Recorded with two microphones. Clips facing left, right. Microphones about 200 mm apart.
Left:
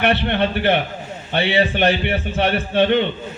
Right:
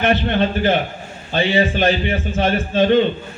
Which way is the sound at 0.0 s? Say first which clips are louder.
Right 1 dB; 65° left (ahead or behind).